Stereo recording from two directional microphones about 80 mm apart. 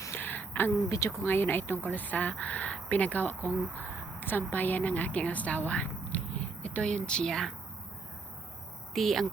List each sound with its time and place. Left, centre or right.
0.2 s a sound: left
1.2 s a woman's voice: left; by 7.5 s centre
8.9 s speech: centre